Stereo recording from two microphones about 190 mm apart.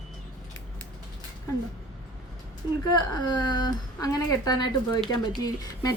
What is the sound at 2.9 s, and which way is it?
A woman's voice, 25° left (ahead or behind).